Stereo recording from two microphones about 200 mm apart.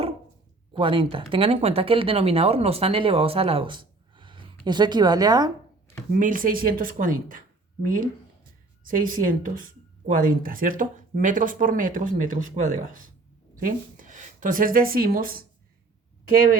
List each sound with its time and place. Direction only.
0.7 s speech: 25° right (ahead or behind)
6.1 s a woman's voice: 40° right (ahead or behind)